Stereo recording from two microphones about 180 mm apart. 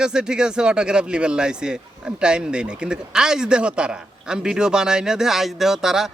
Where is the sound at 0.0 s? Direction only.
5° right (ahead or behind).